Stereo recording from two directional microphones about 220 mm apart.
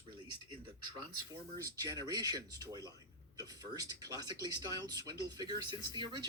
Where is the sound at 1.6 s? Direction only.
15° right (ahead or behind).